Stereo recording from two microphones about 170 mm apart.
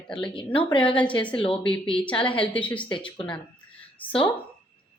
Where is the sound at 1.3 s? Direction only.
35° left (ahead or behind).